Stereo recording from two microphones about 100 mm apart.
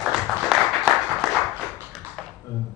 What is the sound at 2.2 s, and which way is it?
Computer keyboard, 5° left (ahead or behind).